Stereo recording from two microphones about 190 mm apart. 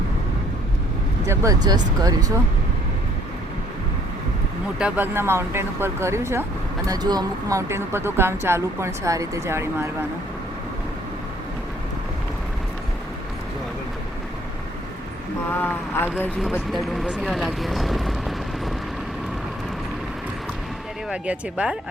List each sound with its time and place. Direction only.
1.2 s speech: 15° right (ahead or behind)
4.8 s speech: 10° right (ahead or behind)
15.4 s a sound: 10° left (ahead or behind)
16.4 s speech: centre (ahead or behind)
21.1 s speech: 5° right (ahead or behind)